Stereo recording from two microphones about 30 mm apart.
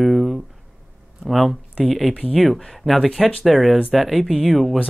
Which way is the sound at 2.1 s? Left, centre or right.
Right.